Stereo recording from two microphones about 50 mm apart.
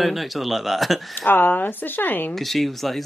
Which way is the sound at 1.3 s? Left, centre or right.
Left.